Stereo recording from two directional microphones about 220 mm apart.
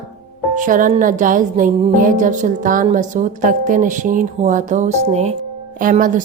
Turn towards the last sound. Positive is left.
turn(degrees=-35)  # may be behind; listen again after turning